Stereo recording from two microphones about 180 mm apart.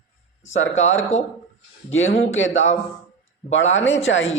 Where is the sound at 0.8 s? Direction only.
90° left.